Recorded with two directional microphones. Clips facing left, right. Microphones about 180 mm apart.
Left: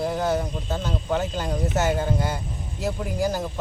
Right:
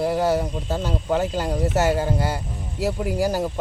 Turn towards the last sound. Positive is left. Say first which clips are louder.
# right 3 dB
turn(degrees=-10)  # may be behind; listen again after turning